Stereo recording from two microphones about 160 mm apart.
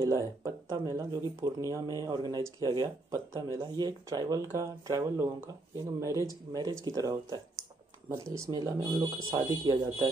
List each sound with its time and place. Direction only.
0.1 s speech: 20° right (ahead or behind)